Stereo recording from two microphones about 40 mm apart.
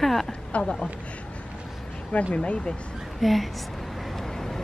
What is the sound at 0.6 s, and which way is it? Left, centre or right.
Speech, left.